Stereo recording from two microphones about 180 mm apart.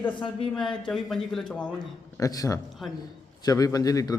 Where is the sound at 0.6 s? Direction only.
Centre (ahead or behind).